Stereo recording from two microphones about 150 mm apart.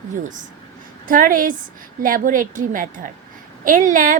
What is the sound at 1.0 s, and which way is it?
A woman's voice, 65° right (ahead or behind).